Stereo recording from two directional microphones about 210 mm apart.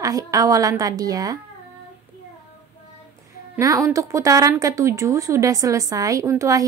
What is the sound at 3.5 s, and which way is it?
A woman's voice, 15° right (ahead or behind).